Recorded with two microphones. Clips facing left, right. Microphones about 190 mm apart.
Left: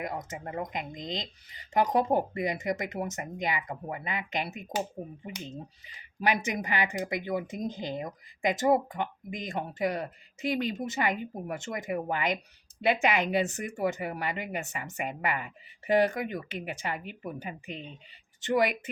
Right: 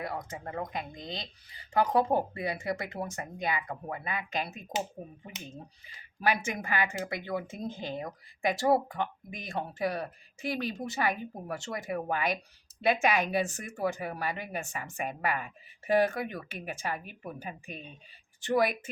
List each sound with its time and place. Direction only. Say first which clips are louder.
0.0 s speech: left 1 dB; 20° left (ahead or behind)